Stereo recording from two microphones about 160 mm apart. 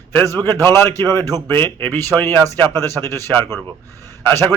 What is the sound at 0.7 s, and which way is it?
A man's voice, 15° left (ahead or behind).